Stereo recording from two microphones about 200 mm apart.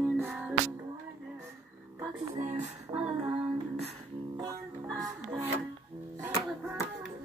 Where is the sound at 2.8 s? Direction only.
5° right (ahead or behind).